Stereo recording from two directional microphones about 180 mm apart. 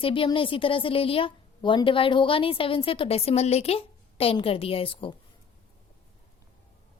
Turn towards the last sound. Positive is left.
turn(degrees=30)  # may be behind; listen again after turning